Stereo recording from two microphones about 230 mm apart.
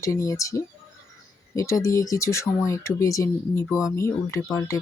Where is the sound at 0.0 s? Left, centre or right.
Centre.